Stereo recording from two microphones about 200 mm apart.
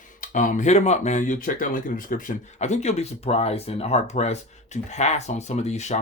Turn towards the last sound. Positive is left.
turn(degrees=35)  # may be behind; listen again after turning